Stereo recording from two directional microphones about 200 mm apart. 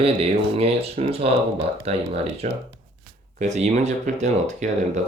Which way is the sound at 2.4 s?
35° right (ahead or behind).